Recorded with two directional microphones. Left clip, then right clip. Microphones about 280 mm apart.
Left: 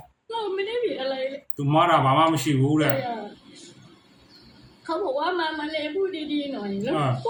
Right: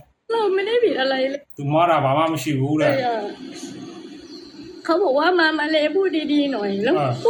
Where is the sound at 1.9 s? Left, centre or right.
Centre.